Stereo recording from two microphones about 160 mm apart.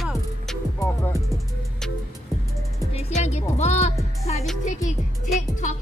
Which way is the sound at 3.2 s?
40° left (ahead or behind).